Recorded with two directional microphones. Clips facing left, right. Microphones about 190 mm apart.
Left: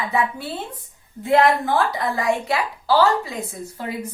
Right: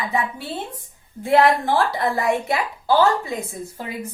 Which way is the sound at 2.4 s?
20° right (ahead or behind).